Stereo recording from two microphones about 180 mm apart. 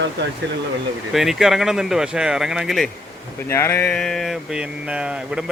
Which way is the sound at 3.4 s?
15° left (ahead or behind).